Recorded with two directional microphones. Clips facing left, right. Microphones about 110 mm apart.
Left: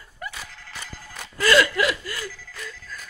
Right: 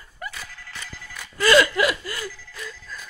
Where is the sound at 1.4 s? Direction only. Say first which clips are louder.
Right 2 dB; 15° right (ahead or behind).